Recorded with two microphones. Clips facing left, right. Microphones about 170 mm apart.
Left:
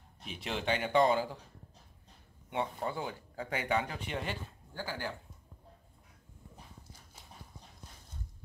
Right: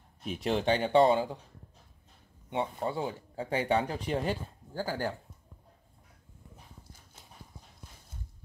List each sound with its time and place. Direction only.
0.2 s speech: 40° right (ahead or behind); by 1.4 s 25° right (ahead or behind)
2.5 s speech: 25° right (ahead or behind); by 5.1 s 40° right (ahead or behind)